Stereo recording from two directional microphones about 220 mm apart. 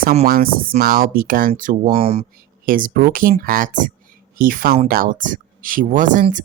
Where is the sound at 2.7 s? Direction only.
40° right (ahead or behind).